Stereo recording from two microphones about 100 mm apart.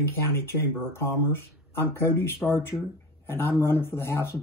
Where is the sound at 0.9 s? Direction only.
25° left (ahead or behind).